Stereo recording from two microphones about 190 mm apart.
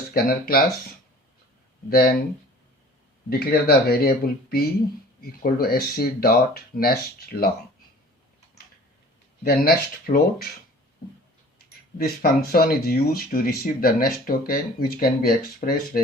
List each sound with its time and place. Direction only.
0.1 s speech: 50° left (ahead or behind)
3.2 s speech: 55° left (ahead or behind)
9.4 s speech: 55° left (ahead or behind)
11.9 s speech: 50° left (ahead or behind)